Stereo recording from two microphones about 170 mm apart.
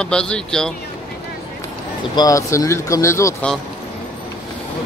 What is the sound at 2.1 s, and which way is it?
Speech, 20° left (ahead or behind).